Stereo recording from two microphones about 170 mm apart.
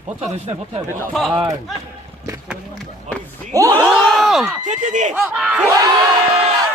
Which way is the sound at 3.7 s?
10° left (ahead or behind).